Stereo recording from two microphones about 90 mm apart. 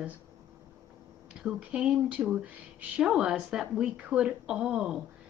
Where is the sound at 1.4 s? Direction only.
10° right (ahead or behind).